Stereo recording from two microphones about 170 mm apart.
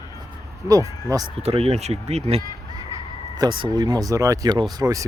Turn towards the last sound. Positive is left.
turn(degrees=-25)  # may be behind; listen again after turning